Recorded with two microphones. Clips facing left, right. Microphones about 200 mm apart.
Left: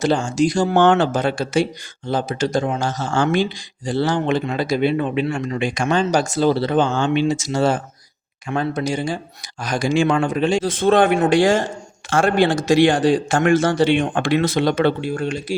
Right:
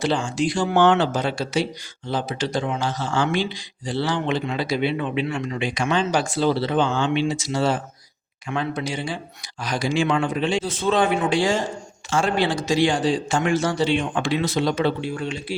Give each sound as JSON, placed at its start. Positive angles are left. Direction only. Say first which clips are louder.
{"t": 0.0, "sound": "a man's voice", "louder": "left 5 dB", "side_deg": 45}